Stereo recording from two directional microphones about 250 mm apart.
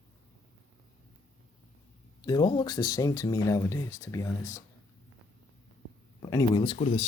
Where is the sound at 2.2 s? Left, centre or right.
Centre.